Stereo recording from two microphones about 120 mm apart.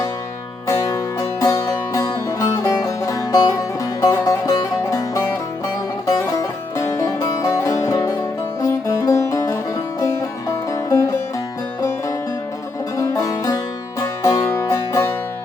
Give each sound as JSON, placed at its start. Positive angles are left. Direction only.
{"t": 0.7, "sound": "music", "side_deg": 25}